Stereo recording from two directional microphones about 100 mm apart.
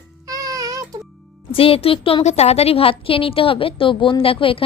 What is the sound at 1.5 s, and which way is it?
A woman's voice, 70° left (ahead or behind).